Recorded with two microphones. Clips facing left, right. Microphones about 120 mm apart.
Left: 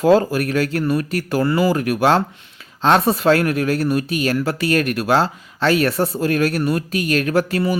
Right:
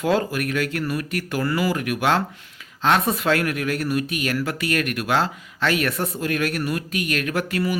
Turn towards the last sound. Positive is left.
turn(degrees=35)  # may be behind; listen again after turning